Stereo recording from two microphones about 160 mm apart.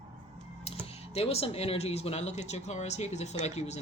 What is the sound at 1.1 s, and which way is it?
Speech, 40° left (ahead or behind).